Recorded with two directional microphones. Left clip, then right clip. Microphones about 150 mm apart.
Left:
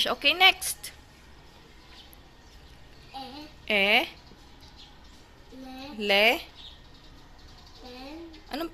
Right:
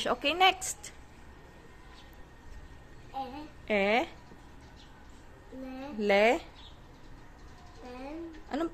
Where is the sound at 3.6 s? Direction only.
10° right (ahead or behind).